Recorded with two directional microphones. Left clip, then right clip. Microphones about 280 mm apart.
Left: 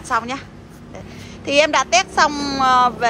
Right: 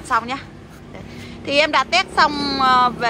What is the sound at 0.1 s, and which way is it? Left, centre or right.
Speech, centre.